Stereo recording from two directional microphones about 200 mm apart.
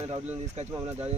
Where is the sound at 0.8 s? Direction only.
15° right (ahead or behind).